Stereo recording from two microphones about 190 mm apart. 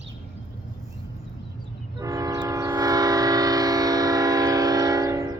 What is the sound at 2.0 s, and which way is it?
Train, 20° right (ahead or behind).